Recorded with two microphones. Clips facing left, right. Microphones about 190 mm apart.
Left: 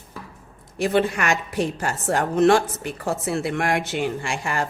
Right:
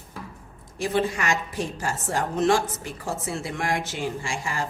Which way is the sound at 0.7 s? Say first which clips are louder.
Left 4 dB; 65° left (ahead or behind).